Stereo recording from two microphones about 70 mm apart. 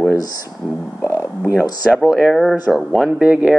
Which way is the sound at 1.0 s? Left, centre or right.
Left.